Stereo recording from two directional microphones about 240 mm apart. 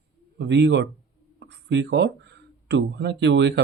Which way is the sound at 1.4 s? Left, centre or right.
Right.